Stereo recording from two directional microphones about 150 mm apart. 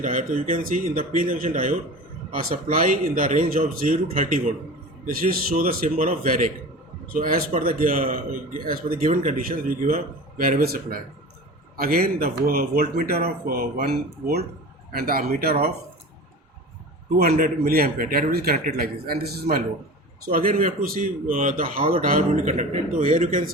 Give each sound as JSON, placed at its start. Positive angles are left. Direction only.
{"t": 0.0, "sound": "a man's voice", "side_deg": -55}
{"t": 4.2, "sound": "speech", "side_deg": -60}
{"t": 5.0, "sound": "a man's voice", "side_deg": -70}
{"t": 17.2, "sound": "speech", "side_deg": -90}
{"t": 18.5, "sound": "speech", "side_deg": -70}
{"t": 20.2, "sound": "a man's voice", "side_deg": -70}
{"t": 22.4, "sound": "a man's voice", "side_deg": -50}
{"t": 23.0, "sound": "speech", "side_deg": -60}